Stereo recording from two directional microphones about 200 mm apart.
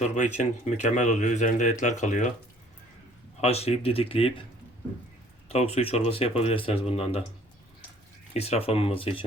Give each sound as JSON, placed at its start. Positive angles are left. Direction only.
{"t": 0.0, "sound": "speech", "side_deg": 35}
{"t": 3.4, "sound": "speech", "side_deg": 30}
{"t": 5.5, "sound": "speech", "side_deg": 30}
{"t": 8.3, "sound": "speech", "side_deg": 30}